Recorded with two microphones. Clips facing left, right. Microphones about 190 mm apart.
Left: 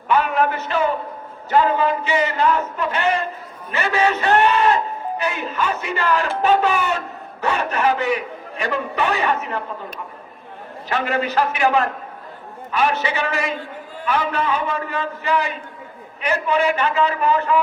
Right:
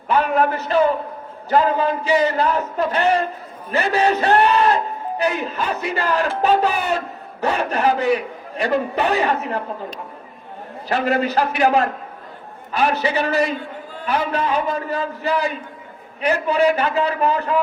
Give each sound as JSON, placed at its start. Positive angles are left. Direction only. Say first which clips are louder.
{"t": 0.1, "sound": "a man's voice", "louder": "right 1 dB", "side_deg": -35}
{"t": 10.8, "sound": "a man's voice", "louder": "right 3 dB", "side_deg": -35}